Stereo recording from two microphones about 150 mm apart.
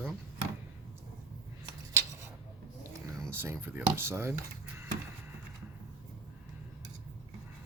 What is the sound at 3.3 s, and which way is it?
Speech, 15° right (ahead or behind).